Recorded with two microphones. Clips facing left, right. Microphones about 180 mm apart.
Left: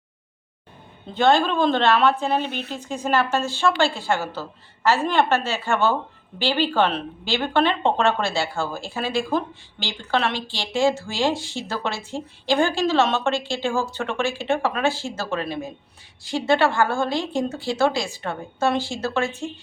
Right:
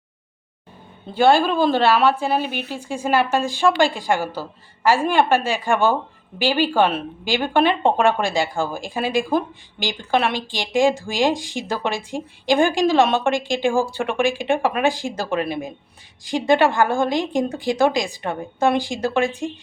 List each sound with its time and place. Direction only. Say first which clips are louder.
1.1 s speech: right 3 dB; 10° right (ahead or behind)